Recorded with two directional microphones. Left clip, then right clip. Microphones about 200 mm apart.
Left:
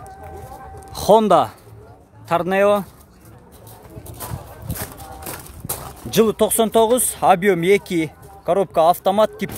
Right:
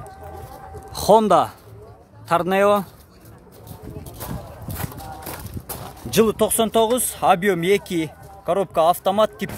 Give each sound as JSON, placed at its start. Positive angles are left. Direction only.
{"t": 0.9, "sound": "a man's voice", "side_deg": 5}
{"t": 4.7, "sound": "speech", "side_deg": 10}